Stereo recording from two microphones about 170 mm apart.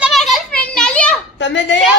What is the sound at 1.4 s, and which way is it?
Speech, 90° left.